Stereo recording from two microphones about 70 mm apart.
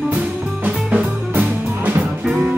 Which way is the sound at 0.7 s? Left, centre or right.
Centre.